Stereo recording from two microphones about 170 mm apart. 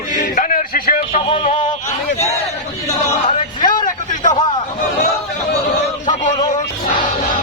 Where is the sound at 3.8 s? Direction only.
50° left (ahead or behind).